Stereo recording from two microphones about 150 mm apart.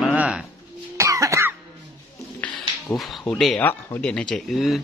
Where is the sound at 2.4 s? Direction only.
5° left (ahead or behind).